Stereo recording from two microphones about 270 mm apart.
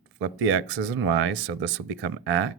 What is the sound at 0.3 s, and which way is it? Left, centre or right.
Speech, right.